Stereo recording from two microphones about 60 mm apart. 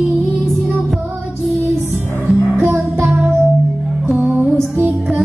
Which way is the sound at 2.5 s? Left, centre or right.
Right.